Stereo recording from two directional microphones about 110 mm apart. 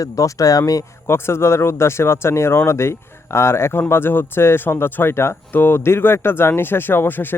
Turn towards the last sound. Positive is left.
turn(degrees=20)  # may be behind; listen again after turning